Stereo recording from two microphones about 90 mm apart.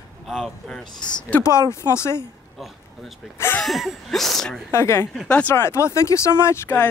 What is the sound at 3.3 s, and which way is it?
Speech, 25° left (ahead or behind).